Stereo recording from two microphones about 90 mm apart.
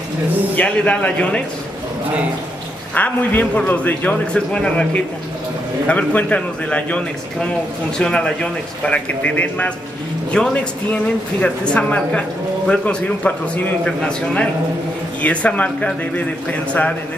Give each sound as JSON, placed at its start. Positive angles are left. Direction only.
{"t": 0.6, "sound": "a man's voice", "side_deg": 15}
{"t": 2.9, "sound": "a man's voice", "side_deg": 20}
{"t": 8.0, "sound": "a man's voice", "side_deg": 10}